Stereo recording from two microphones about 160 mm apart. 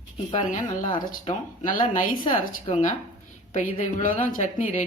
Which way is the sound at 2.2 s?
35° left (ahead or behind).